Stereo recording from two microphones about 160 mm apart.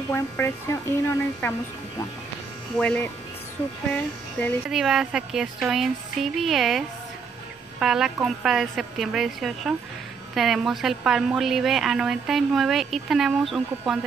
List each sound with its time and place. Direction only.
0.1 s a woman's voice: 15° left (ahead or behind)
2.8 s a woman's voice: 10° left (ahead or behind)
4.6 s a woman's voice: 5° right (ahead or behind)
7.8 s a woman's voice: 5° right (ahead or behind)